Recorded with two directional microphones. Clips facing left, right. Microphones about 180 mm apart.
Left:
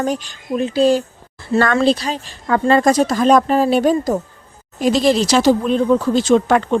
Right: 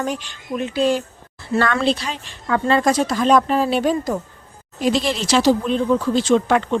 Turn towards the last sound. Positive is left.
turn(degrees=45)  # may be behind; listen again after turning